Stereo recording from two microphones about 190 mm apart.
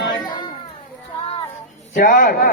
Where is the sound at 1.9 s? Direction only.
45° left (ahead or behind).